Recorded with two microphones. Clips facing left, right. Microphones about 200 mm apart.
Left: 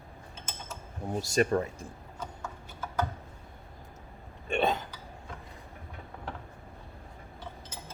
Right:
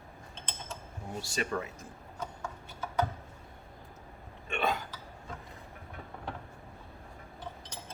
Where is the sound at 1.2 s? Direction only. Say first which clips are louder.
Left 8 dB; 40° left (ahead or behind).